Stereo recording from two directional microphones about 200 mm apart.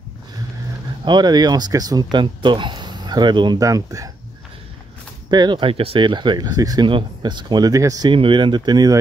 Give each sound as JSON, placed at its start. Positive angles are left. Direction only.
{"t": 1.0, "sound": "speech", "side_deg": -20}
{"t": 5.3, "sound": "speech", "side_deg": -20}